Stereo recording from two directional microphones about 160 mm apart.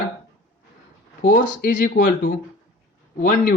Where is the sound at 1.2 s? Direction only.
55° left (ahead or behind).